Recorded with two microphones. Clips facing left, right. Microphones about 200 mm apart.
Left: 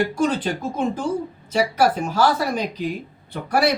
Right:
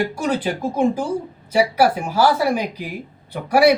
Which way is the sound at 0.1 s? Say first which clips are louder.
Even; 10° right (ahead or behind).